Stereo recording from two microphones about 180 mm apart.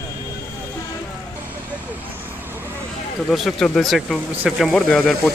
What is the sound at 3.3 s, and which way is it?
Speech, centre (ahead or behind).